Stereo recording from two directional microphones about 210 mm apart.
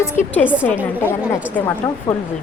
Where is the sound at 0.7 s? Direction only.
5° right (ahead or behind).